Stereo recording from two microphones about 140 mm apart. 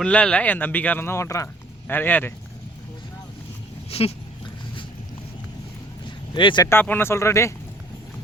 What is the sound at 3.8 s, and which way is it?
Dog, 45° left (ahead or behind).